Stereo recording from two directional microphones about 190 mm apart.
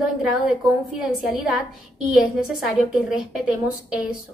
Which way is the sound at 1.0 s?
Centre (ahead or behind).